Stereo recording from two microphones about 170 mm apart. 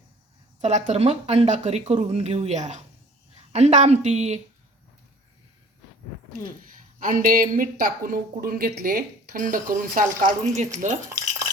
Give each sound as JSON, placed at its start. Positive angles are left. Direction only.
{"t": 0.6, "sound": "speech", "side_deg": -45}
{"t": 7.0, "sound": "speech", "side_deg": -50}